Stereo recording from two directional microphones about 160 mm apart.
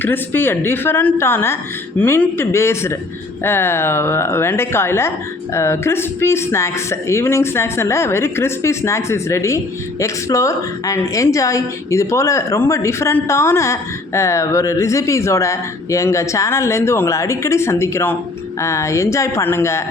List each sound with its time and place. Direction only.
0.0 s a woman's voice: 15° left (ahead or behind)